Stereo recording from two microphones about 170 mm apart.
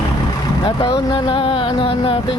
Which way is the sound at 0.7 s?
25° left (ahead or behind).